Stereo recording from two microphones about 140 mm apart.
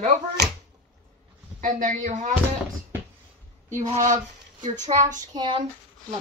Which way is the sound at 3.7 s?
55° right (ahead or behind).